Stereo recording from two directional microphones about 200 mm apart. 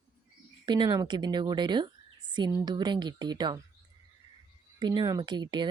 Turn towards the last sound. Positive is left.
turn(degrees=-20)  # may be behind; listen again after turning